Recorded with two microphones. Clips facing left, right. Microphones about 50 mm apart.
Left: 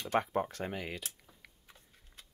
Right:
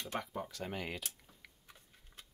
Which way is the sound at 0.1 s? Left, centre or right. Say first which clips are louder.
Left 11 dB; left.